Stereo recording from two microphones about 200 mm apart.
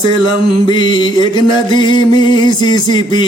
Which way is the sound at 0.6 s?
20° left (ahead or behind).